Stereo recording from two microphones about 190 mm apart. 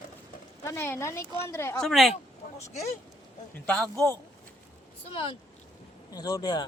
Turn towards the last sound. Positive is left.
turn(degrees=20)  # may be behind; listen again after turning